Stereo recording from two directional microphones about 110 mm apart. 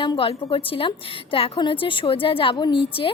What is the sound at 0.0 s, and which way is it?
A woman's voice, 50° left (ahead or behind).